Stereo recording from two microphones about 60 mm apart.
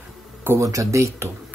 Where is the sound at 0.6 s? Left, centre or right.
Right.